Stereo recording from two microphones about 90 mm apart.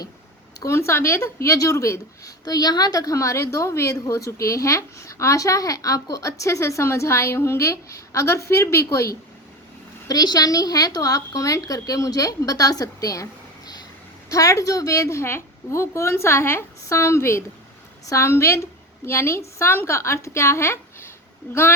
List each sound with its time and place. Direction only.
0.6 s a woman's voice: 30° left (ahead or behind)
2.4 s a woman's voice: 45° left (ahead or behind)
10.1 s a woman's voice: 45° left (ahead or behind)
14.3 s a woman's voice: 40° left (ahead or behind); by 21.6 s 20° left (ahead or behind)